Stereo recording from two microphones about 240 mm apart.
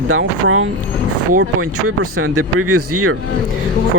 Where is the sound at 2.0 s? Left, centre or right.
Right.